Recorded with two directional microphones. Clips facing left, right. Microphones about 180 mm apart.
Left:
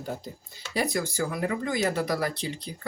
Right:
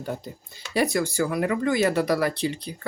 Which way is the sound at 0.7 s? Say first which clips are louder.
Right 5 dB; 70° right (ahead or behind).